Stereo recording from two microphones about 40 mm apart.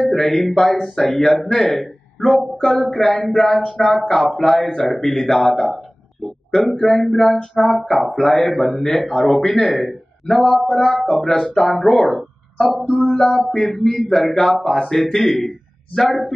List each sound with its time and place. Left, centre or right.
0.0 s a man's voice: centre
6.8 s speech: centre
13.0 s a man's voice: centre